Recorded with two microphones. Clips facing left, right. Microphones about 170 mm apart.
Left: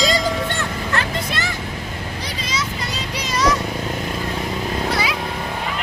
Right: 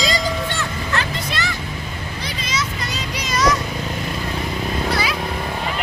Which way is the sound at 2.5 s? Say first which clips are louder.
Even; 30° left (ahead or behind).